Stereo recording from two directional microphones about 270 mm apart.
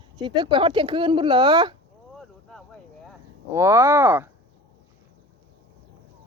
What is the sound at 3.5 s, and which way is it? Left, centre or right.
Speech, centre.